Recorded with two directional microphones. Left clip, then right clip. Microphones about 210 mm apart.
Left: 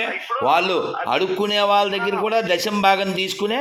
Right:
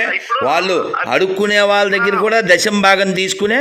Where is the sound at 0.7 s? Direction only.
25° right (ahead or behind).